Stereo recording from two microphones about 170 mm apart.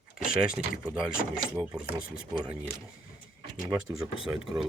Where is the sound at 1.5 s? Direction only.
10° right (ahead or behind).